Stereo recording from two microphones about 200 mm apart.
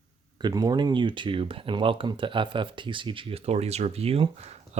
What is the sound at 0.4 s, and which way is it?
Speech, 20° right (ahead or behind).